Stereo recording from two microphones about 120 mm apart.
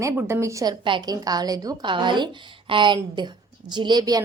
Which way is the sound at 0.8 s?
40° right (ahead or behind).